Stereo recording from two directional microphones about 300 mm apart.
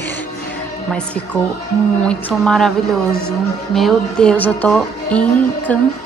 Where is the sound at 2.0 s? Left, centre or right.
Centre.